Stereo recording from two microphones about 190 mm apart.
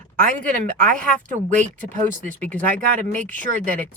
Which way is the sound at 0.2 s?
45° right (ahead or behind).